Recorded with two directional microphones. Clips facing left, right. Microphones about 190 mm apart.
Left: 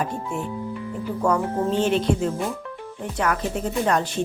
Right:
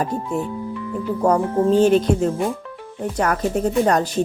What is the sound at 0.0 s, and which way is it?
Music, 40° right (ahead or behind).